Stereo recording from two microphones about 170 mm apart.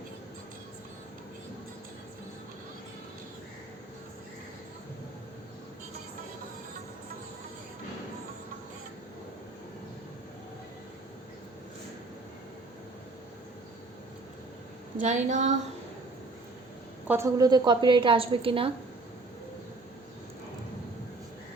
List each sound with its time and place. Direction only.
15.0 s a woman's voice: 45° right (ahead or behind)
17.1 s a woman's voice: 15° right (ahead or behind); by 18.7 s 30° right (ahead or behind)